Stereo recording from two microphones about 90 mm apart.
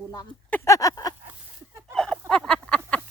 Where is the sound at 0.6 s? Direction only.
35° left (ahead or behind).